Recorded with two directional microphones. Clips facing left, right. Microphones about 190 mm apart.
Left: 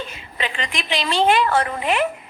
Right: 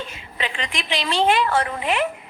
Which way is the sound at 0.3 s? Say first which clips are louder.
Left 1 dB; 45° left (ahead or behind).